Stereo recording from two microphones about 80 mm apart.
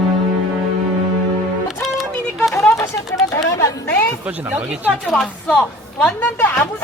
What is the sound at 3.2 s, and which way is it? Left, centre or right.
Chatter, left.